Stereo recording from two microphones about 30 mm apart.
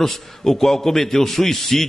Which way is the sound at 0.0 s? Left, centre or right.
Centre.